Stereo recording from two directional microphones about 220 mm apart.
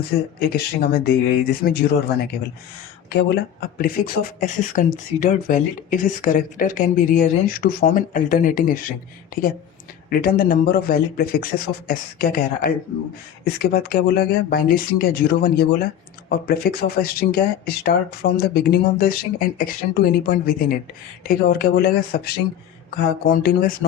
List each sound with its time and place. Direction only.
0.5 s speech: 45° left (ahead or behind)